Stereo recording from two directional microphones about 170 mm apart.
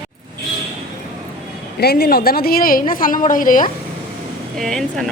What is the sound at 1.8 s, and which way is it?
A woman's voice, 65° left (ahead or behind).